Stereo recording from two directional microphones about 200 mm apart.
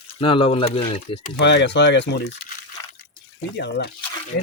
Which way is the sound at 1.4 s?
60° left (ahead or behind).